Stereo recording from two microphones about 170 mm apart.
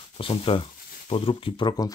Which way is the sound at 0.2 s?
35° left (ahead or behind).